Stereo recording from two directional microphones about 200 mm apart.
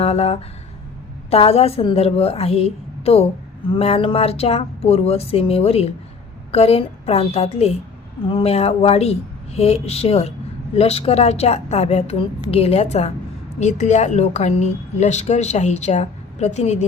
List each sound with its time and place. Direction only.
0.0 s speech: 30° left (ahead or behind)
1.3 s a sound: 30° left (ahead or behind)
6.5 s a woman's voice: 30° left (ahead or behind)